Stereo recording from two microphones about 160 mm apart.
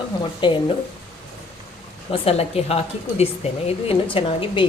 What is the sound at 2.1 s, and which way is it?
A woman's voice, 40° left (ahead or behind).